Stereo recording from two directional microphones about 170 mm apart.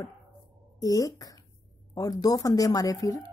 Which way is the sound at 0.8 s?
20° left (ahead or behind).